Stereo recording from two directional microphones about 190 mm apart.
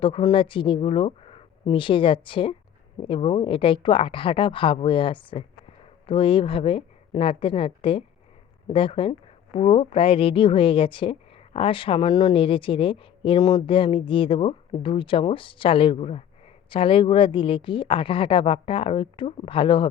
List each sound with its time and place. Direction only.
0.0 s speech: 25° left (ahead or behind)